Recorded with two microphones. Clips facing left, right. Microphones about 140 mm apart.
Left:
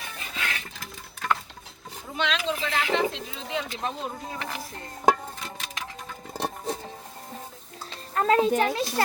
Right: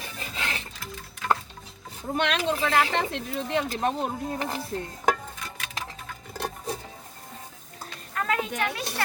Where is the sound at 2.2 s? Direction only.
55° right (ahead or behind).